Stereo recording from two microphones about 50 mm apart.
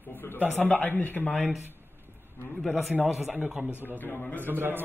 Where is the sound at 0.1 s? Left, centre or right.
Left.